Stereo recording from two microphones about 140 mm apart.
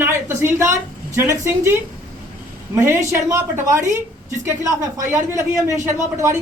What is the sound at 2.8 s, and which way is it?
A woman's voice, 20° right (ahead or behind).